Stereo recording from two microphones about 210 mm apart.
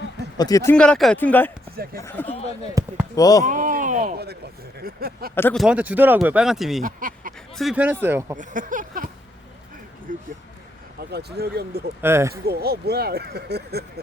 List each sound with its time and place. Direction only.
0.3 s speech: 15° left (ahead or behind)
1.7 s speech: 45° right (ahead or behind)
2.0 s speech: 10° left (ahead or behind)
2.8 s speech: 15° right (ahead or behind)
3.2 s speech: 15° left (ahead or behind)
3.4 s a sound: 40° right (ahead or behind)
5.3 s speech: 10° left (ahead or behind)
5.6 s speech: 5° right (ahead or behind)
6.8 s a sound: 40° right (ahead or behind)
7.5 s speech: centre (ahead or behind)
8.4 s speech: 40° right (ahead or behind)
10.1 s speech: 40° right (ahead or behind)
12.0 s speech: 10° right (ahead or behind)
12.3 s speech: 50° right (ahead or behind)